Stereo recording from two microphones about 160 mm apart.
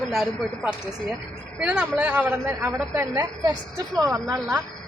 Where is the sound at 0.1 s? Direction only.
Centre (ahead or behind); by 4.4 s 20° right (ahead or behind).